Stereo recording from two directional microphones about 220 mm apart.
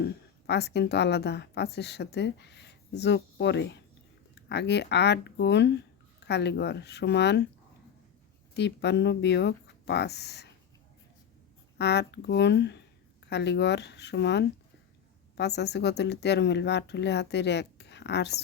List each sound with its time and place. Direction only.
0.0 s a woman's voice: 50° left (ahead or behind)
8.5 s speech: 50° left (ahead or behind)
11.8 s speech: 50° left (ahead or behind)